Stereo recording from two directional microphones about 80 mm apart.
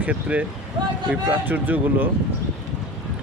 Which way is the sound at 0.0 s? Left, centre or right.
Centre.